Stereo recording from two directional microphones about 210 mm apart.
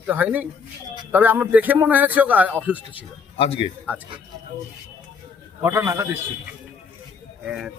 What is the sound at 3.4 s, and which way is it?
Speech, 25° left (ahead or behind).